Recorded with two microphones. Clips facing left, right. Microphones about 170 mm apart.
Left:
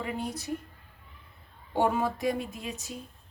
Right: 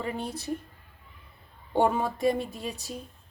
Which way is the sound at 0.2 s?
30° right (ahead or behind).